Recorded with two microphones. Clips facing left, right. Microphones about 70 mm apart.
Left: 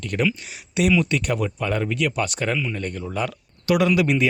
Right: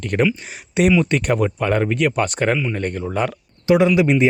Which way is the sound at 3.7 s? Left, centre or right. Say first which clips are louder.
Right 4 dB; right.